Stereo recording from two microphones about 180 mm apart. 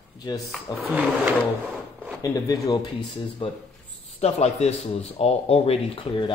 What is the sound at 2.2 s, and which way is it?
Speech, 20° left (ahead or behind).